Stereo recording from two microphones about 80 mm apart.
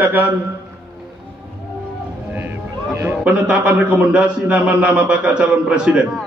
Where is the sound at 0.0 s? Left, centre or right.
Right.